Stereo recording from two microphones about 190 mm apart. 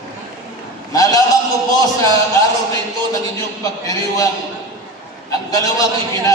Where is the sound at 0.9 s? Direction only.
20° left (ahead or behind).